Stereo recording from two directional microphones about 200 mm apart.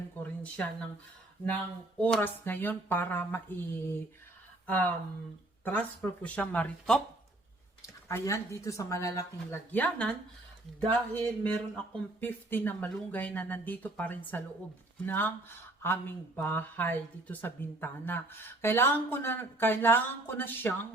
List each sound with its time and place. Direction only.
0.2 s a sound: 10° left (ahead or behind)
2.0 s speech: 5° left (ahead or behind)
11.1 s speech: 10° left (ahead or behind)